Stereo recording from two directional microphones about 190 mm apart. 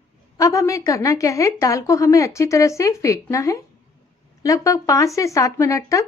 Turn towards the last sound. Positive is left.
turn(degrees=15)  # may be behind; listen again after turning